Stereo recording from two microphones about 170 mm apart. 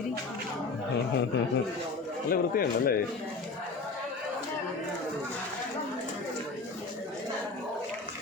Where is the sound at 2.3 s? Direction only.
60° left (ahead or behind).